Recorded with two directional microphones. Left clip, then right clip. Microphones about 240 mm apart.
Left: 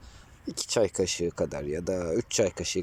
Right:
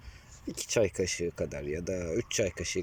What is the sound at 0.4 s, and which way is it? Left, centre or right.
Speech, centre.